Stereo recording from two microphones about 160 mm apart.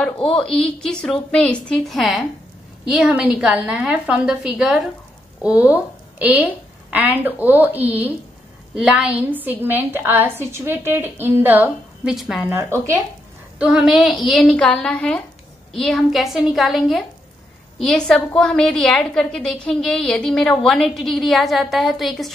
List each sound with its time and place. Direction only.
0.3 s a woman's voice: 5° left (ahead or behind)
12.5 s a woman's voice: 15° right (ahead or behind)
13.6 s a woman's voice: centre (ahead or behind)